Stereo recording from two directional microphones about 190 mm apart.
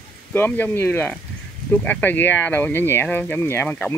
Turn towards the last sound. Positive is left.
turn(degrees=10)  # may be behind; listen again after turning